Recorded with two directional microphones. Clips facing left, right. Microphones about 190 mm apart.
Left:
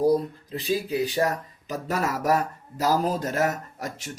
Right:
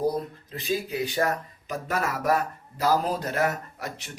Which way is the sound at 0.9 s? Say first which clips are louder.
Left 2 dB; 35° left (ahead or behind).